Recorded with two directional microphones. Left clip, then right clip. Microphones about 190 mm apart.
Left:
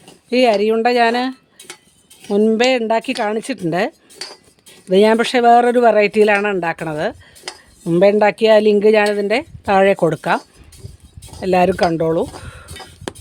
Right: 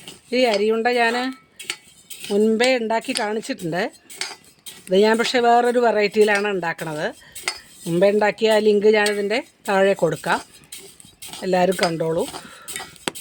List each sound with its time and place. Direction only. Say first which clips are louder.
0.3 s speech: left 5 dB; 55° left (ahead or behind)
2.3 s speech: left 3 dB; 55° left (ahead or behind)
12.7 s a sound: right 2 dB; 5° left (ahead or behind)